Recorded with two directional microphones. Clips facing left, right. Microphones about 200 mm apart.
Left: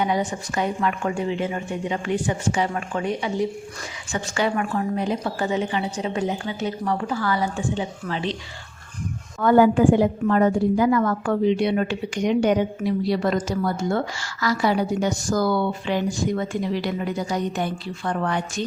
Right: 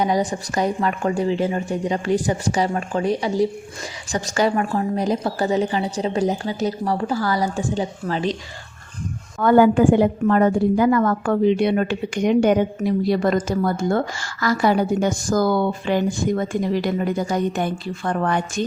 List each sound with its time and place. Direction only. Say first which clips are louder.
0.0 s a woman's voice: right 3 dB; 35° right (ahead or behind)
9.4 s a woman's voice: right 2 dB; 60° right (ahead or behind)